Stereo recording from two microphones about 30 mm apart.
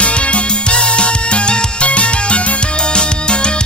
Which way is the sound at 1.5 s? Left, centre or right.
Left.